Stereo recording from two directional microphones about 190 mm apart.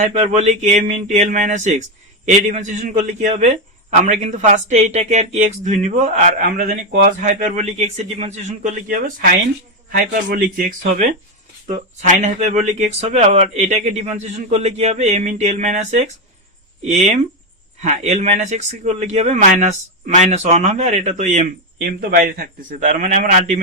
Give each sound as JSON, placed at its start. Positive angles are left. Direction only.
{"t": 0.0, "sound": "a man's voice", "side_deg": -40}